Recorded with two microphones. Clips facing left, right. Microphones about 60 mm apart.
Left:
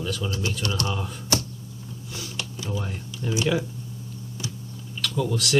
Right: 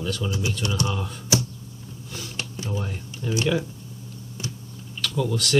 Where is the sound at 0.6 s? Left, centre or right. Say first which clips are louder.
Right 2 dB; centre.